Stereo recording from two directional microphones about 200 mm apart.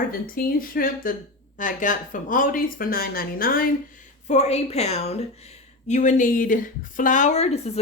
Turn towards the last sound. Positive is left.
turn(degrees=35)  # may be behind; listen again after turning